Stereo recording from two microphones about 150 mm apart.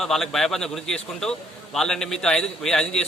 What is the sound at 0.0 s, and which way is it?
A man's voice, centre (ahead or behind).